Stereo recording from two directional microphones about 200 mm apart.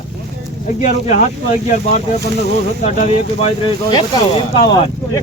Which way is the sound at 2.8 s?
30° left (ahead or behind).